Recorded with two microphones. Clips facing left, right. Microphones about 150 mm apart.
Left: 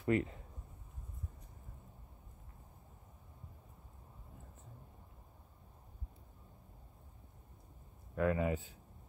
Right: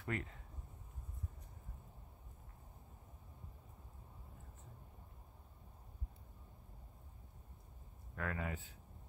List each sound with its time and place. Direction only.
0.0 s speech: 15° left (ahead or behind)
8.2 s speech: 15° left (ahead or behind)